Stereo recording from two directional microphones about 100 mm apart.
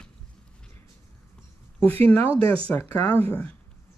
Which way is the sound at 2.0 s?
15° left (ahead or behind).